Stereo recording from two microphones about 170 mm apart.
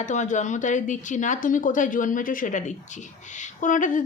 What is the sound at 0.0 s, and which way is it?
Speech, 45° left (ahead or behind).